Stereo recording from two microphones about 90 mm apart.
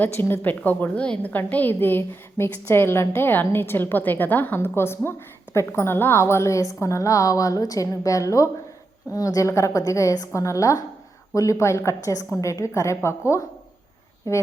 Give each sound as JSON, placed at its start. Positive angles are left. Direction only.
{"t": 0.0, "sound": "a woman's voice", "side_deg": 25}